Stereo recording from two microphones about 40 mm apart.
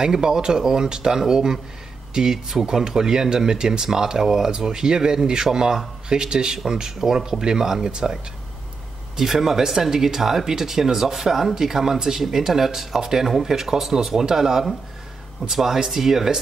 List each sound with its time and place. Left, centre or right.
0.0 s speech: centre